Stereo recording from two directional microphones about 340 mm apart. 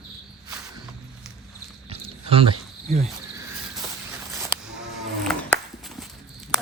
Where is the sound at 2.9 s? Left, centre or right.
Centre.